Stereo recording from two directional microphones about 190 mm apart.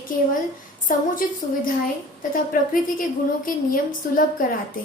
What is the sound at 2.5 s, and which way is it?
Speech, 50° left (ahead or behind).